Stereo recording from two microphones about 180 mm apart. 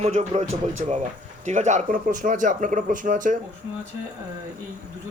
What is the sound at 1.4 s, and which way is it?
Speech, 40° right (ahead or behind).